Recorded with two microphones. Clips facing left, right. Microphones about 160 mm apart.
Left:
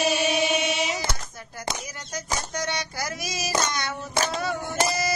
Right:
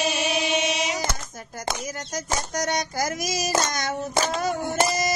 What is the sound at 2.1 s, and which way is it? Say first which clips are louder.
Child singing: right 1 dB; 45° right (ahead or behind).